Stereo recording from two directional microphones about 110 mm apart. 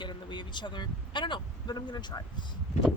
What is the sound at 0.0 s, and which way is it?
Speech, 45° left (ahead or behind).